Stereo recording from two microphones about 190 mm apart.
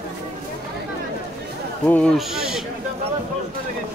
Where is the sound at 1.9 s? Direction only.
5° left (ahead or behind).